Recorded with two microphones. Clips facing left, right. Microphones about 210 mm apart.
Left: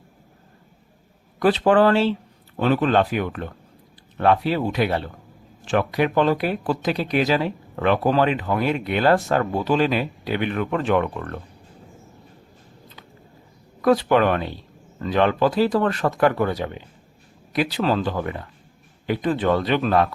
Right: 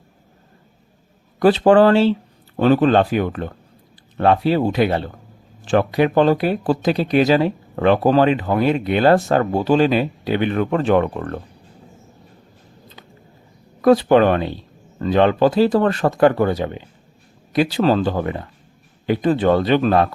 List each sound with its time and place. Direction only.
1.4 s speech: 30° right (ahead or behind)
13.8 s speech: 30° right (ahead or behind)